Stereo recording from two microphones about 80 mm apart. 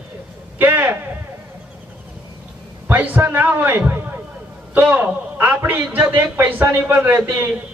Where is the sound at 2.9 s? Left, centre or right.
Right.